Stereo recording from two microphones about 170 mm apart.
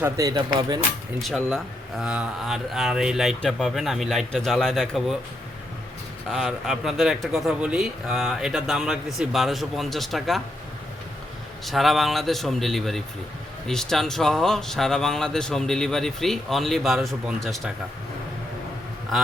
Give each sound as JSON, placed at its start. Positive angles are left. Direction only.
{"t": 0.0, "sound": "speech", "side_deg": -20}
{"t": 1.2, "sound": "speech", "side_deg": 0}
{"t": 6.2, "sound": "speech", "side_deg": 0}
{"t": 11.6, "sound": "speech", "side_deg": 0}